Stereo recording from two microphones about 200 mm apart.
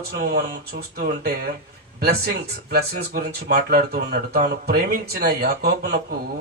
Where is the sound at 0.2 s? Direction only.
50° right (ahead or behind).